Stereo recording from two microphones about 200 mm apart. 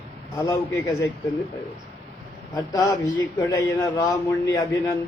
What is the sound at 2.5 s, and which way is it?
A man's voice, 15° left (ahead or behind).